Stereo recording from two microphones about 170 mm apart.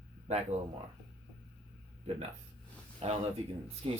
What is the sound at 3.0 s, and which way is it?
Speech, 40° right (ahead or behind).